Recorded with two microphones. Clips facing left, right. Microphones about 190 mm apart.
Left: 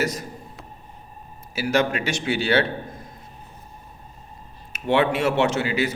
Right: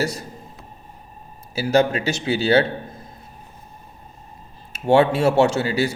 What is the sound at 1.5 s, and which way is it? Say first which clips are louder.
A man's voice: right 4 dB; 30° right (ahead or behind).